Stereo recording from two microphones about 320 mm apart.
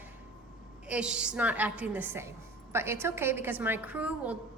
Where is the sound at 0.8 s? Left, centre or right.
Centre.